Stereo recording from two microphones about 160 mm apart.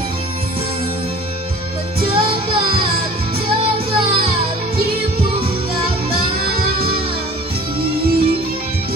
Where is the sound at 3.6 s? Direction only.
35° right (ahead or behind).